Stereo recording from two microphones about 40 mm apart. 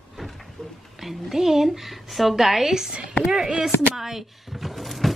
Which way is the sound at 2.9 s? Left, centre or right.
Right.